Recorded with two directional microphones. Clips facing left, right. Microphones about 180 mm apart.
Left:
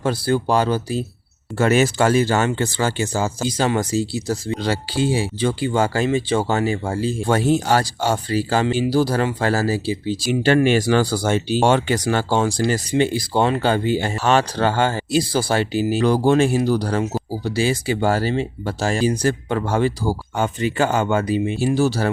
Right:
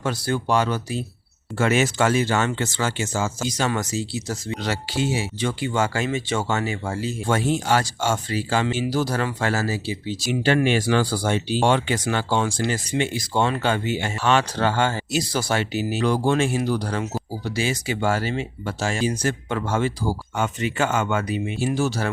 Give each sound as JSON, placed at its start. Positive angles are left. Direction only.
{"t": 0.0, "sound": "speech", "side_deg": 30}